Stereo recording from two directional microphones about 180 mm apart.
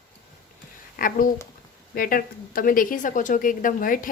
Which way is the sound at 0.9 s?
50° left (ahead or behind).